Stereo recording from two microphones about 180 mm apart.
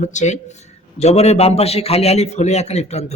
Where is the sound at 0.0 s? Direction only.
40° left (ahead or behind).